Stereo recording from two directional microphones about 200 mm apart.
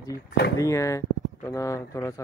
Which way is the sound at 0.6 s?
15° left (ahead or behind).